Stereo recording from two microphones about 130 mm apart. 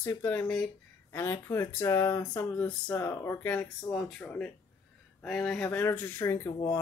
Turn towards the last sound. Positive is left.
turn(degrees=20)  # may be behind; listen again after turning